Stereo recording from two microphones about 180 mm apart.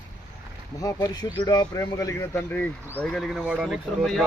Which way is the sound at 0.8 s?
20° left (ahead or behind).